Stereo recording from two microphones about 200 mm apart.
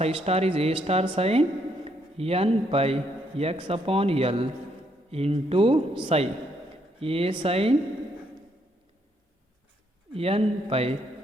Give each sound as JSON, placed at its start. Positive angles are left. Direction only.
{"t": 0.3, "sound": "speech", "side_deg": -30}
{"t": 10.1, "sound": "speech", "side_deg": -30}